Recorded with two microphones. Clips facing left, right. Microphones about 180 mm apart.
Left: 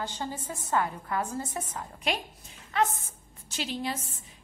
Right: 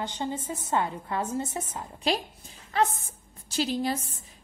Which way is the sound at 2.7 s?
35° right (ahead or behind).